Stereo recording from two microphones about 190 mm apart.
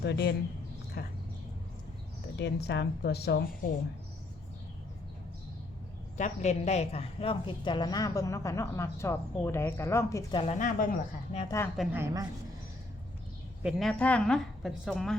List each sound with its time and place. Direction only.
0.0 s a woman's voice: 60° left (ahead or behind)
2.4 s a woman's voice: 60° left (ahead or behind)
6.1 s a woman's voice: 40° left (ahead or behind); by 10.4 s 15° left (ahead or behind)
10.4 s speech: 40° left (ahead or behind)
11.4 s a woman's voice: 15° left (ahead or behind)
11.9 s a woman's voice: 15° right (ahead or behind)
13.6 s a woman's voice: 5° right (ahead or behind)